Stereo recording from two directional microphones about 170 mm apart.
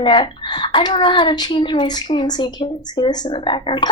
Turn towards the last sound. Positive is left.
turn(degrees=30)  # may be behind; listen again after turning